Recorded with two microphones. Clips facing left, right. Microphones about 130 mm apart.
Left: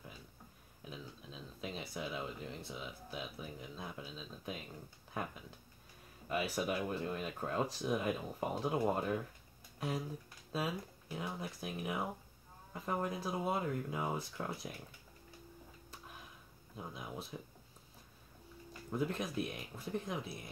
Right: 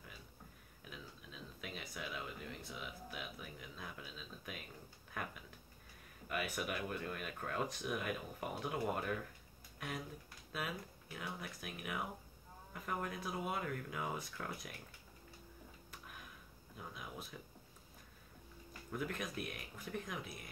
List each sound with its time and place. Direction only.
0.8 s speech: 30° left (ahead or behind)
16.7 s speech: 30° left (ahead or behind)
18.7 s speech: 25° left (ahead or behind)